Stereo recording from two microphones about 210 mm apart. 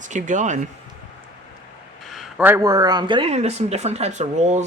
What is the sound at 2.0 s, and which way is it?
Speech, centre (ahead or behind).